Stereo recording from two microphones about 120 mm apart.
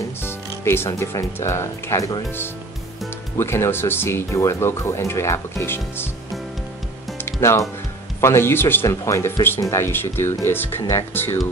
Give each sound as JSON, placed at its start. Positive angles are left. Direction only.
{"t": 0.2, "sound": "speech", "side_deg": 20}
{"t": 3.3, "sound": "speech", "side_deg": 20}
{"t": 7.2, "sound": "speech", "side_deg": 25}